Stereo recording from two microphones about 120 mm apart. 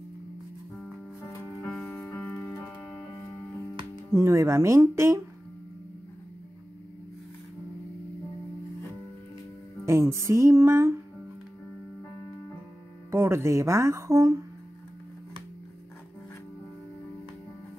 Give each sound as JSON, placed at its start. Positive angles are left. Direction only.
{"t": 1.7, "sound": "music", "side_deg": 0}
{"t": 4.1, "sound": "speech", "side_deg": -25}
{"t": 9.8, "sound": "speech", "side_deg": -25}
{"t": 13.1, "sound": "speech", "side_deg": -20}